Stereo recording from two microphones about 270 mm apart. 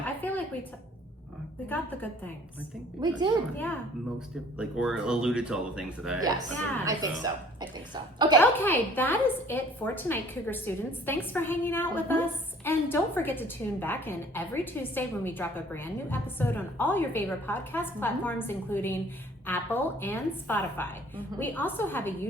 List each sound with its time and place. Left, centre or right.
0.0 s a sound: centre
1.7 s a woman's voice: centre
3.0 s a woman's voice: centre
4.5 s speech: centre
6.8 s a woman's voice: centre
8.4 s a woman's voice: centre